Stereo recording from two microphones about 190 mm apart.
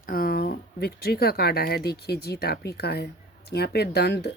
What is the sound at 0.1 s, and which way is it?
Speech, 50° left (ahead or behind).